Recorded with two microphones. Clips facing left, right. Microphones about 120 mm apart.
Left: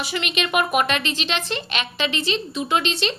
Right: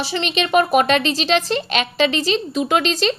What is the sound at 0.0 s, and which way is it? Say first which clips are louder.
Speech: right 4 dB; 30° right (ahead or behind).